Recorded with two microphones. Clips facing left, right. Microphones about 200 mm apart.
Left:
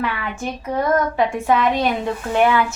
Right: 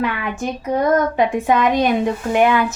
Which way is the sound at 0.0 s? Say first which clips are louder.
Right 3 dB; 15° right (ahead or behind).